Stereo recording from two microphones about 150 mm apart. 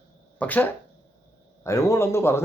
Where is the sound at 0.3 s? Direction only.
10° left (ahead or behind).